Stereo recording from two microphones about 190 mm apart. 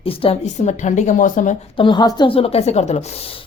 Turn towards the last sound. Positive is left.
turn(degrees=30)  # may be behind; listen again after turning